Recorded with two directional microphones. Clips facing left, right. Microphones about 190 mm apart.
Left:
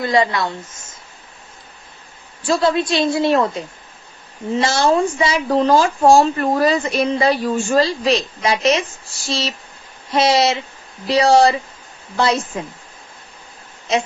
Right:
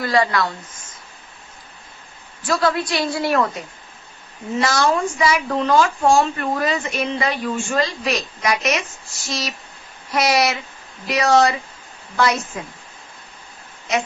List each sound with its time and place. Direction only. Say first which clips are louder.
0.0 s speech: left 2 dB; 20° left (ahead or behind)
2.4 s a woman's voice: left 3 dB; 25° left (ahead or behind)